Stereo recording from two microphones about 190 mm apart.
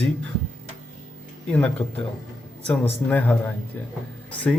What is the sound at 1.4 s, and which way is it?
Speech, 5° left (ahead or behind).